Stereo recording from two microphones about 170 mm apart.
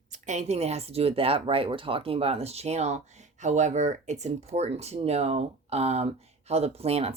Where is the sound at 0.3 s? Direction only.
40° right (ahead or behind).